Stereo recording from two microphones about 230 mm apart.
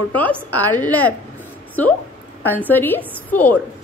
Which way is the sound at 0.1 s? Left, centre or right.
Centre.